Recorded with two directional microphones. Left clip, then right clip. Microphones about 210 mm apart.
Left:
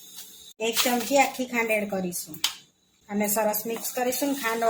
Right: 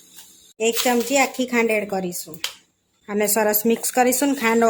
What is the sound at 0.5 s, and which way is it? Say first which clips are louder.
A woman's voice: right 5 dB; 30° right (ahead or behind).